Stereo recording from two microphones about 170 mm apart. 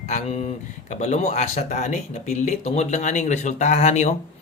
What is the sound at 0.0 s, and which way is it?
Speech, 40° left (ahead or behind).